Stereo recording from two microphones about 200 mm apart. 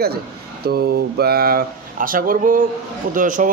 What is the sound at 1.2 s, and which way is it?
A man's voice, 50° right (ahead or behind).